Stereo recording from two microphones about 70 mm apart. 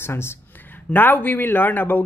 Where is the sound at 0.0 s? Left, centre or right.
Left.